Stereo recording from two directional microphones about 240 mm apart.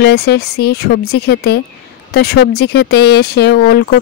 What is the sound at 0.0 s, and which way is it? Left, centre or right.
Speech, left.